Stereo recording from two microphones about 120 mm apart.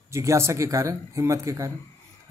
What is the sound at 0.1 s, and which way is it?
A man's voice, 25° right (ahead or behind).